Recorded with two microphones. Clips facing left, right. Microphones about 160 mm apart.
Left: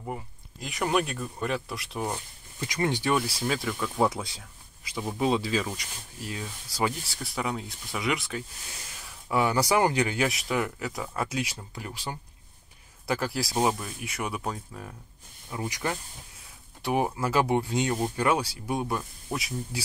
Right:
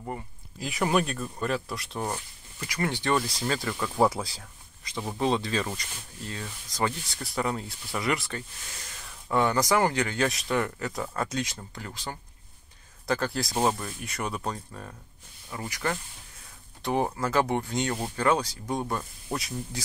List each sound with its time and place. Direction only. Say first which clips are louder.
0.0 s speech: even; centre (ahead or behind)
2.6 s speech: left 2 dB; 20° left (ahead or behind); by 19.8 s 5° left (ahead or behind)